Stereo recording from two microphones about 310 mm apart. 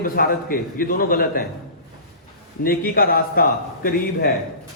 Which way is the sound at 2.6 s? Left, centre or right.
Left.